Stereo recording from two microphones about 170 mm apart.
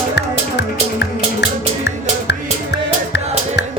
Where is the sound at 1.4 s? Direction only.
85° left.